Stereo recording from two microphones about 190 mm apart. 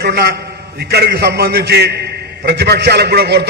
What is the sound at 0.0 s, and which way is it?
A man's voice, 55° right (ahead or behind).